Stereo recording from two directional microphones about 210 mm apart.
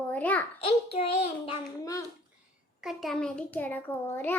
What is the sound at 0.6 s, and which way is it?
A child's voice, 30° left (ahead or behind).